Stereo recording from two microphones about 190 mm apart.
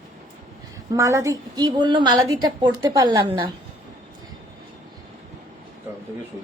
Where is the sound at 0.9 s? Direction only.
15° right (ahead or behind).